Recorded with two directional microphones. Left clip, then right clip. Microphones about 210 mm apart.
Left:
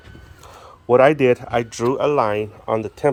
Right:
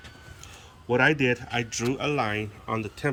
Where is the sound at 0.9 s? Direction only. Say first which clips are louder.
Left 9 dB; 20° left (ahead or behind).